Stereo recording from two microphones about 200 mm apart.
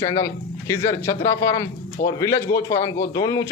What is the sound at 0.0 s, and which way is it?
A man's voice, 15° left (ahead or behind).